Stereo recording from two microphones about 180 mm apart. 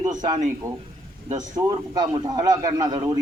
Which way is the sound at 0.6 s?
15° right (ahead or behind).